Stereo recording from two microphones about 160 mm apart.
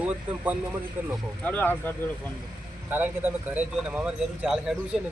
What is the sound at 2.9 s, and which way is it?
Speech, 10° right (ahead or behind).